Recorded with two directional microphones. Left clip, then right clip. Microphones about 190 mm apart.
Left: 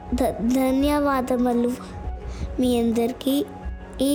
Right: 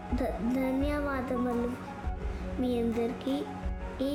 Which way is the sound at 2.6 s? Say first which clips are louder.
Left 9 dB; 45° left (ahead or behind).